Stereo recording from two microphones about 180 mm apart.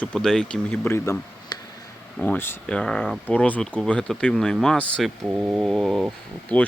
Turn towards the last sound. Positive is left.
turn(degrees=10)  # may be behind; listen again after turning